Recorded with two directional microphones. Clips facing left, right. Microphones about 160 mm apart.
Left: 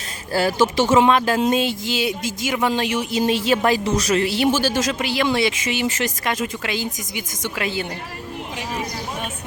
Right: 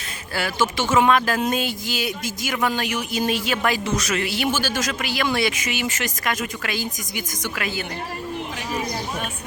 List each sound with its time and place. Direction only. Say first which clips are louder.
0.3 s speech: left 6 dB; 35° left (ahead or behind)